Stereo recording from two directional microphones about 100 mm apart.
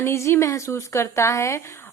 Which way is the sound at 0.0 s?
25° left (ahead or behind).